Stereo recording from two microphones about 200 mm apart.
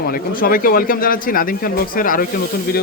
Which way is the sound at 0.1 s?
45° left (ahead or behind).